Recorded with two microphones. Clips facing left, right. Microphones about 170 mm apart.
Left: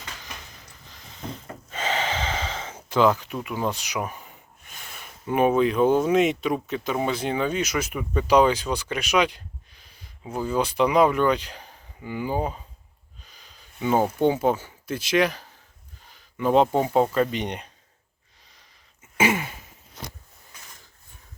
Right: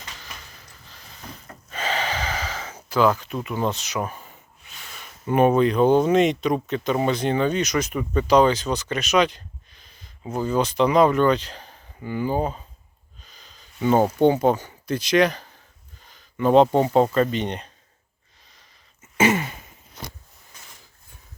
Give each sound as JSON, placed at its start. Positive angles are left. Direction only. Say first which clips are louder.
{"t": 0.9, "sound": "snort", "louder": "left 5 dB", "side_deg": 20}
{"t": 2.9, "sound": "speech", "louder": "even", "side_deg": 15}
{"t": 5.2, "sound": "speech", "louder": "right 2 dB", "side_deg": 5}
{"t": 19.1, "sound": "a sound", "louder": "right 3 dB", "side_deg": 10}